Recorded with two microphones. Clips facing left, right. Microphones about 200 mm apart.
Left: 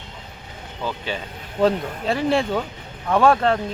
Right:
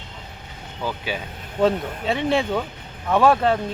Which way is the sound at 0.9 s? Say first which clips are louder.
Even; 10° right (ahead or behind).